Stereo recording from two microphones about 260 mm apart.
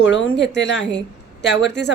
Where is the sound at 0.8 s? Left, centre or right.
Centre.